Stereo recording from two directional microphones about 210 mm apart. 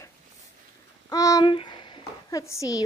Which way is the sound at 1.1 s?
15° left (ahead or behind).